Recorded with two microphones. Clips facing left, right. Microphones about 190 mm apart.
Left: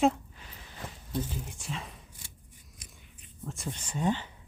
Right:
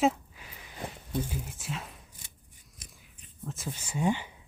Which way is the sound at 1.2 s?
5° right (ahead or behind).